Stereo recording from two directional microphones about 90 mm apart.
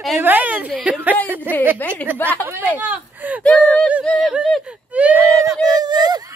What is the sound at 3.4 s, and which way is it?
Speech, 10° left (ahead or behind).